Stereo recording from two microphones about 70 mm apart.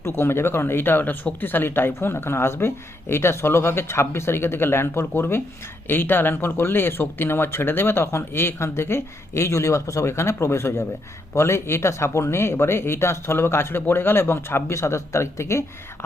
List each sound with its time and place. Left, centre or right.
0.0 s speech: left